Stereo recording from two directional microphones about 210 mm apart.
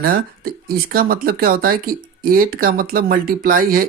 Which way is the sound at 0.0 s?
45° right (ahead or behind).